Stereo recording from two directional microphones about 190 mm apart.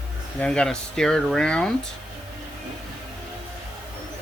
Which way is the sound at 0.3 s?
5° left (ahead or behind).